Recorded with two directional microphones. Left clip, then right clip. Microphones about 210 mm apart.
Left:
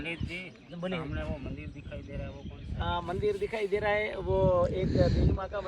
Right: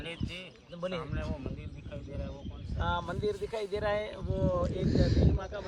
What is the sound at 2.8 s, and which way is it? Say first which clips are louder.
Speech: left 1 dB; 15° right (ahead or behind).